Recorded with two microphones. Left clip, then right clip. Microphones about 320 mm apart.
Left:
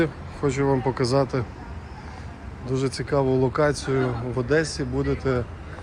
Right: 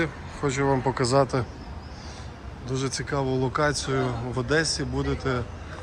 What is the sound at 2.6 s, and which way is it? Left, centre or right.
Speech, centre.